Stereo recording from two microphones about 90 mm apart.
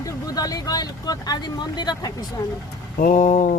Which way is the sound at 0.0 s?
45° left (ahead or behind).